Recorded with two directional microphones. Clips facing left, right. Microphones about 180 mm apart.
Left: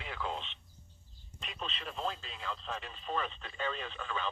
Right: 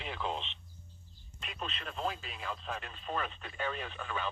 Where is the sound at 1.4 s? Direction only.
5° right (ahead or behind).